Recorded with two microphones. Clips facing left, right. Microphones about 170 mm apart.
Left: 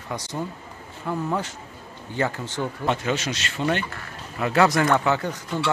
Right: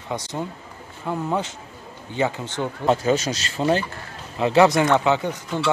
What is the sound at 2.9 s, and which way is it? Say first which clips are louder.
Speech: right 7 dB; 35° right (ahead or behind).